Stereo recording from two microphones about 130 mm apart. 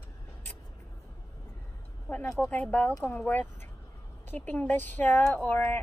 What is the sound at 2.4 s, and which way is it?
A woman's voice, 10° left (ahead or behind).